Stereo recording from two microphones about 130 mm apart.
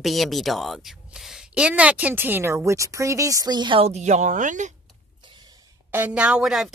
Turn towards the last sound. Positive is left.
turn(degrees=0)  # may be behind; listen again after turning